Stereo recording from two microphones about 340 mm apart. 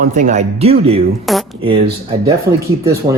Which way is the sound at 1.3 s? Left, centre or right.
Centre.